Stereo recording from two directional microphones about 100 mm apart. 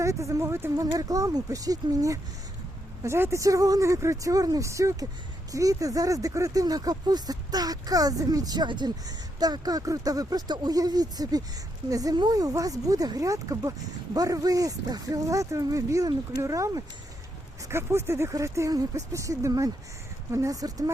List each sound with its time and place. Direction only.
0.0 s speech: 30° right (ahead or behind)